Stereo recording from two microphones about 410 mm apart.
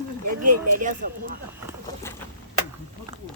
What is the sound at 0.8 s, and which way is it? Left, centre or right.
Speech, centre.